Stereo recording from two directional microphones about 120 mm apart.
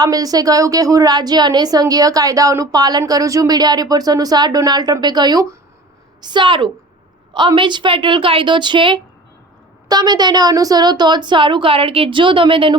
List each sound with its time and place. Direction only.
0.0 s a woman's voice: 30° right (ahead or behind)